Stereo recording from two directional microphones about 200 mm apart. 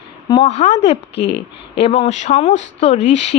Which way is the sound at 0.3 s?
35° left (ahead or behind).